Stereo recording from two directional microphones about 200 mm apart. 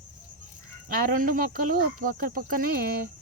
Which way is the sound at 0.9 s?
45° right (ahead or behind).